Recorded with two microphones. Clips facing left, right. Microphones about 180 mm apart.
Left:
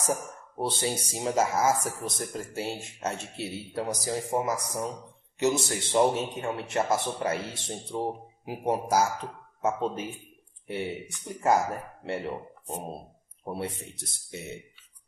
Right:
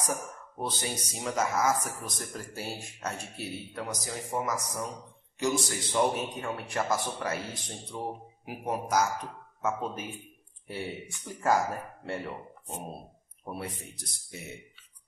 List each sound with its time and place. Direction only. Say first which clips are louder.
0.0 s speech: left 4 dB; 30° left (ahead or behind)
11.2 s speech: left 2 dB; 20° left (ahead or behind)